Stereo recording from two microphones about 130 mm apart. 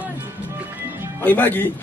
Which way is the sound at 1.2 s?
15° left (ahead or behind).